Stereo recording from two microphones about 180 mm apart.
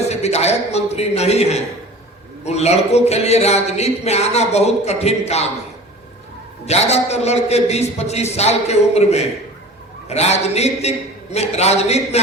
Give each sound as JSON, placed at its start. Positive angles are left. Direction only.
{"t": 0.1, "sound": "a man's voice", "side_deg": 35}
{"t": 6.7, "sound": "a man's voice", "side_deg": 35}